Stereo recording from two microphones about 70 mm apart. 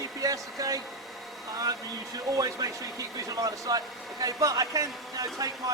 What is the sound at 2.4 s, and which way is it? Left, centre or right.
Speech, right.